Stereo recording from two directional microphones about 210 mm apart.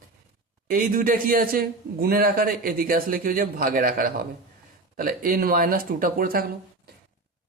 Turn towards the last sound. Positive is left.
turn(degrees=-45)  # may be behind; listen again after turning